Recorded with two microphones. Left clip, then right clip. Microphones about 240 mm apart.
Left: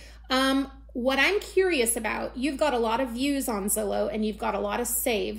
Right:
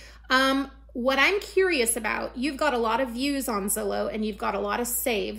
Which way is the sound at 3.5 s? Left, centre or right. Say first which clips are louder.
Even; centre.